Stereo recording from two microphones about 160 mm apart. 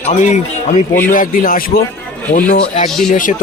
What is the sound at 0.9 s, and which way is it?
A man's voice, 60° left (ahead or behind).